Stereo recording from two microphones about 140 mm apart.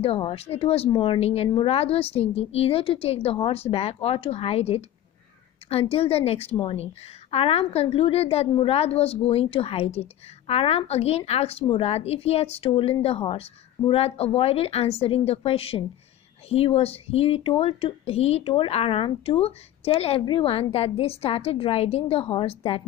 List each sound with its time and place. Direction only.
0.0 s a woman's voice: 45° left (ahead or behind)